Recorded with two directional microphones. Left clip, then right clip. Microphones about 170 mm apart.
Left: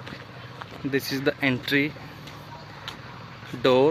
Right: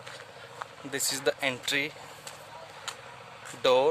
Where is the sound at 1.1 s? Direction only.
20° right (ahead or behind).